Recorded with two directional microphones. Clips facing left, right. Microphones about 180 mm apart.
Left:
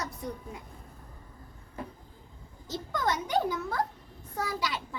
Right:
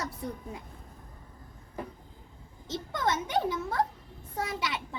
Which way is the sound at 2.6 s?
20° right (ahead or behind).